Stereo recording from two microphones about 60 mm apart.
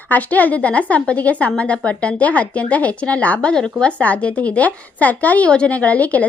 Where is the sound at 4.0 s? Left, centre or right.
Left.